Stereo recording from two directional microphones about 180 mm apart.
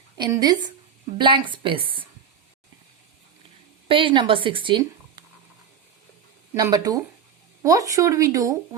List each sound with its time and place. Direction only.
0.2 s speech: 20° right (ahead or behind)
3.8 s a woman's voice: 30° right (ahead or behind)
6.5 s speech: 20° right (ahead or behind)